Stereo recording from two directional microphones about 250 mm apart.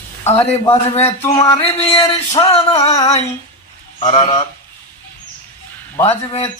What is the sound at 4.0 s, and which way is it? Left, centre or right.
Speech, left.